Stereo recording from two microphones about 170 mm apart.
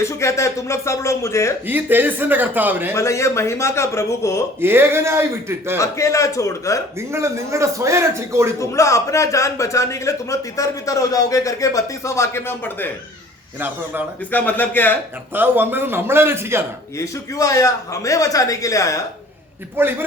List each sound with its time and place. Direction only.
0.0 s a man's voice: 15° left (ahead or behind)
1.6 s a man's voice: 10° right (ahead or behind)
2.9 s a man's voice: 15° left (ahead or behind)
4.6 s a man's voice: 15° right (ahead or behind)
5.7 s a man's voice: 15° left (ahead or behind)
7.1 s a man's voice: 15° right (ahead or behind)
8.5 s a man's voice: 20° left (ahead or behind)
14.3 s a man's voice: 10° left (ahead or behind)
15.3 s a man's voice: 10° right (ahead or behind)
17.0 s speech: 20° left (ahead or behind)
19.7 s a man's voice: 10° right (ahead or behind)